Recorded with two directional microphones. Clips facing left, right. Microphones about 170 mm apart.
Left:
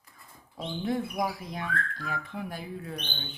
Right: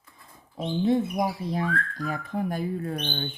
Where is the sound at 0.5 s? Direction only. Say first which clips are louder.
Right 7 dB; 25° right (ahead or behind).